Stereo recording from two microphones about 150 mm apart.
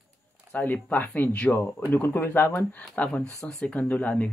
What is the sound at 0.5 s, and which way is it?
A man's voice, 10° left (ahead or behind).